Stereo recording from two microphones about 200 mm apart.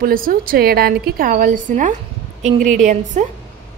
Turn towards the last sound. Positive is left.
turn(degrees=-40)  # may be behind; listen again after turning